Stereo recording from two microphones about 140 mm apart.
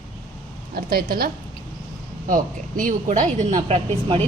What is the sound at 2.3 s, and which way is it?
A woman's voice, 70° right (ahead or behind).